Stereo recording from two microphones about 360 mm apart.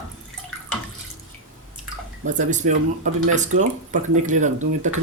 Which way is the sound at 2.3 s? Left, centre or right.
Right.